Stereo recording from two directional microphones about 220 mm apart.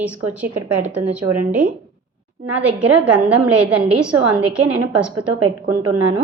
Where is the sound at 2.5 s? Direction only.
5° right (ahead or behind).